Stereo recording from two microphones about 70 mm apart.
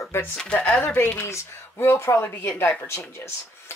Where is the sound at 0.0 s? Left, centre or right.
Left.